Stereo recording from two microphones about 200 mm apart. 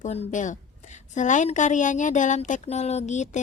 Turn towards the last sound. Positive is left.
turn(degrees=35)  # may be behind; listen again after turning